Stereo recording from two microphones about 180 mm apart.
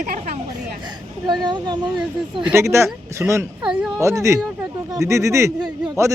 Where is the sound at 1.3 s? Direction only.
25° right (ahead or behind).